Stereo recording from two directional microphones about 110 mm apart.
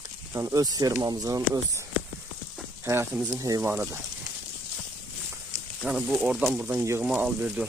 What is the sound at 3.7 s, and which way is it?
Speech, 15° right (ahead or behind).